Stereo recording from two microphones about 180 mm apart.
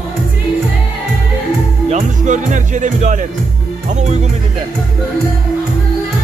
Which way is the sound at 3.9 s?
40° right (ahead or behind).